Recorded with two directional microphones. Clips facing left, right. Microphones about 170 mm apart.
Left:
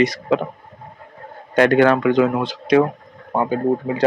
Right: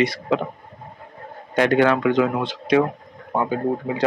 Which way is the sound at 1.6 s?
50° left (ahead or behind).